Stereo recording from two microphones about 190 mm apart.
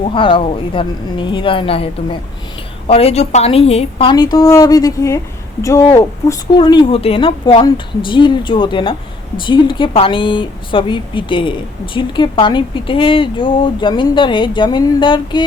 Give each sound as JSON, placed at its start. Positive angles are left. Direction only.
{"t": 0.1, "sound": "speech", "side_deg": 25}